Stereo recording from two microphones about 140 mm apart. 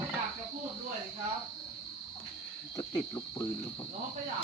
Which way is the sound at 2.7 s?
25° left (ahead or behind).